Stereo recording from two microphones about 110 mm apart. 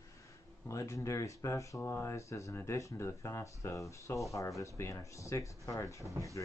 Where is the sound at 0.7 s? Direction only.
30° left (ahead or behind).